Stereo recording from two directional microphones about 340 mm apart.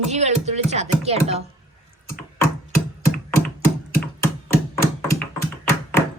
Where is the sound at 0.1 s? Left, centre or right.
Centre.